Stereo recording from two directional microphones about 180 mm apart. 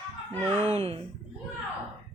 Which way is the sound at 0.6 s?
35° right (ahead or behind).